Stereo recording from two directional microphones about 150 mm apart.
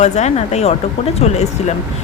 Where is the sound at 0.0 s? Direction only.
50° left (ahead or behind).